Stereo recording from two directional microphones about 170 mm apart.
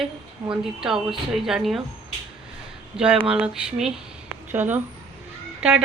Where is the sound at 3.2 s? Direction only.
5° right (ahead or behind).